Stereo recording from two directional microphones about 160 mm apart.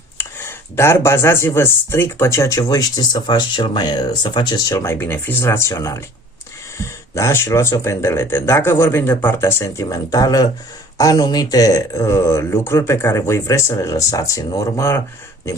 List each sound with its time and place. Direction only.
0.2 s speech: 15° left (ahead or behind)